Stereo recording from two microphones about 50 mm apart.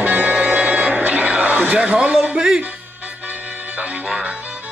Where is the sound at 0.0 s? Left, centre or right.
Right.